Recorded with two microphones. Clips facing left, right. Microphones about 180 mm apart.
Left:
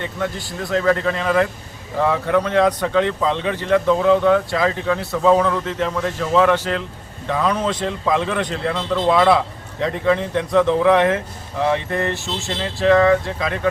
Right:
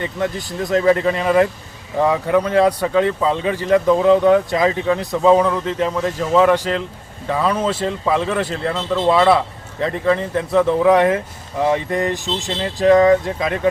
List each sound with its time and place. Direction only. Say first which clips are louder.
0.9 s speech: right 3 dB; 10° right (ahead or behind)